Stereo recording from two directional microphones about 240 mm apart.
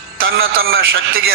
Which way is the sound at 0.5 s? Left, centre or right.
Right.